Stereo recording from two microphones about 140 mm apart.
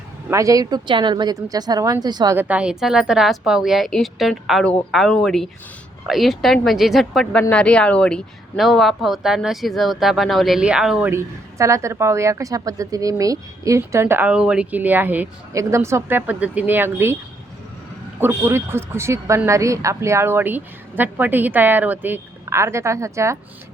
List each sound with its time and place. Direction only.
0.3 s a woman's voice: 25° right (ahead or behind)
2.3 s speech: 10° right (ahead or behind)
11.1 s a woman's voice: 20° right (ahead or behind)
18.2 s a woman's voice: 15° right (ahead or behind)